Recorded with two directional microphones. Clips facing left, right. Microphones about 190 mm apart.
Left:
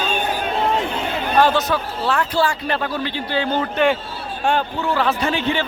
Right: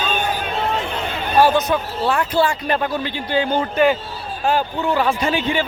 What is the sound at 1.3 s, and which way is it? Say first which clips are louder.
A man's voice: right 2 dB; 15° right (ahead or behind).